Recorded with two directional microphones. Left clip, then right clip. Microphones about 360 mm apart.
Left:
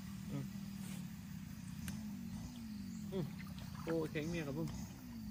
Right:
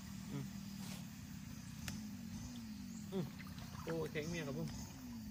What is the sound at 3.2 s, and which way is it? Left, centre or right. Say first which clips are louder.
Speech: even; centre.